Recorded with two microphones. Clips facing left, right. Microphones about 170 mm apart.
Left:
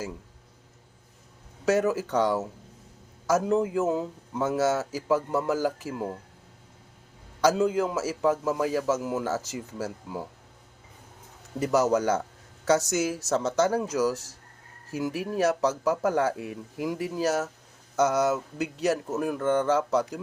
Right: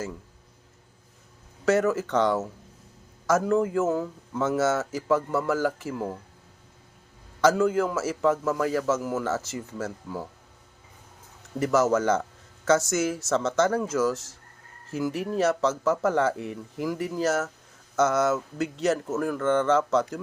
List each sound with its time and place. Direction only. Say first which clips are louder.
1.6 s a man's voice: right 1 dB; 15° left (ahead or behind)
7.4 s a man's voice: right 1 dB; 15° left (ahead or behind)
11.6 s a man's voice: right 1 dB; 15° left (ahead or behind)